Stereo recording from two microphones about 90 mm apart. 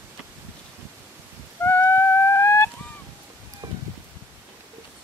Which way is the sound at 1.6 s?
25° left (ahead or behind).